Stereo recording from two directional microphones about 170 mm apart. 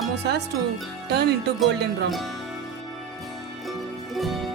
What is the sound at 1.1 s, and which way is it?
Speech, 75° right (ahead or behind).